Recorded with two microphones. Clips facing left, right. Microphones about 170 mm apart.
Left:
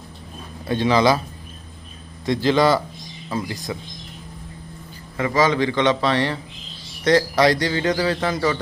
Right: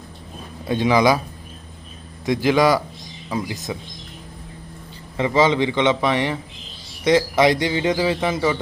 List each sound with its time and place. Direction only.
0.7 s speech: 15° right (ahead or behind)
2.2 s a man's voice: 15° right (ahead or behind)
5.1 s a man's voice: 25° right (ahead or behind)